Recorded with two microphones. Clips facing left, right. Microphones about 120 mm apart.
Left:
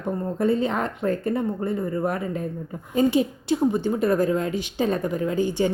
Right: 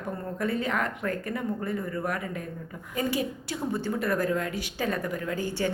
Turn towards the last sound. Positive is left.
turn(degrees=20)  # may be behind; listen again after turning